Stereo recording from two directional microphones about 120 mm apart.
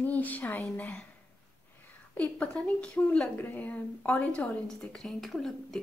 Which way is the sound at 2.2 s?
10° left (ahead or behind).